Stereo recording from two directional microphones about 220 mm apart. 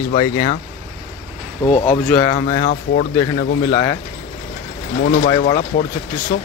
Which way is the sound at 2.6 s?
45° left (ahead or behind).